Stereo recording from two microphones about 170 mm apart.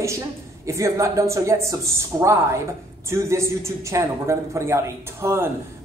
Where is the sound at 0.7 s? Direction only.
15° right (ahead or behind).